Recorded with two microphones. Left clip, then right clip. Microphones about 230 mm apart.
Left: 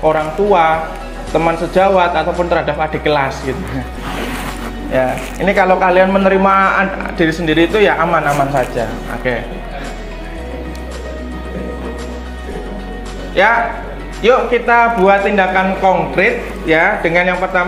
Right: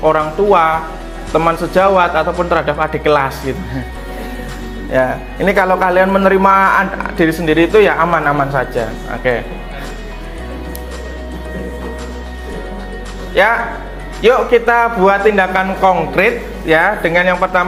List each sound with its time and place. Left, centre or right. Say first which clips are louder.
0.0 s a man's voice: right 1 dB; right
4.9 s a man's voice: right 1 dB; right
13.3 s a man's voice: left 1 dB; right